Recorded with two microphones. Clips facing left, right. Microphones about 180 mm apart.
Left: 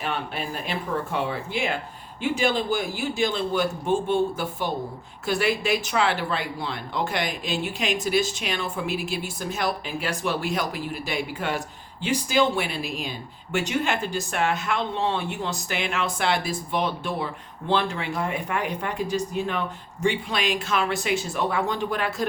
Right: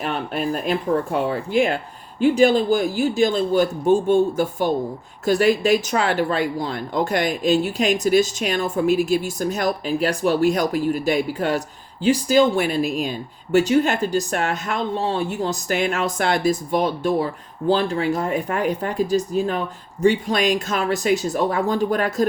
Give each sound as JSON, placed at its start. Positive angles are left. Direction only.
{"t": 0.0, "sound": "speech", "side_deg": -40}